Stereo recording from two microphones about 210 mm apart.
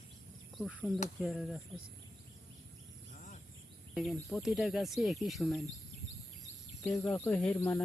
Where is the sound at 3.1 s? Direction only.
35° left (ahead or behind).